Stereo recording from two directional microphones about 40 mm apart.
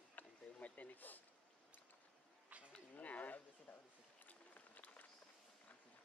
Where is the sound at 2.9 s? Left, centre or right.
Left.